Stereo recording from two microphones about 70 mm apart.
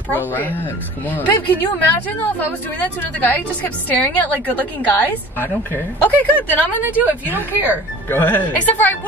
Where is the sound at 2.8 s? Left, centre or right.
Left.